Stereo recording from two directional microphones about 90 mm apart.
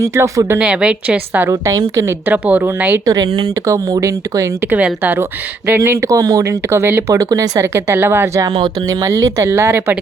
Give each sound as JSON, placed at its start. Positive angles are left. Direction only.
{"t": 0.0, "sound": "speech", "side_deg": -30}
{"t": 0.6, "sound": "a woman's voice", "side_deg": -10}
{"t": 1.5, "sound": "speech", "side_deg": -35}
{"t": 2.2, "sound": "a woman's voice", "side_deg": -15}
{"t": 3.4, "sound": "speech", "side_deg": -40}
{"t": 4.7, "sound": "speech", "side_deg": -20}
{"t": 7.1, "sound": "speech", "side_deg": -40}
{"t": 8.9, "sound": "speech", "side_deg": -35}